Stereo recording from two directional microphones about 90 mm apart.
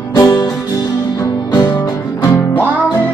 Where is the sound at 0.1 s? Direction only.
45° left (ahead or behind).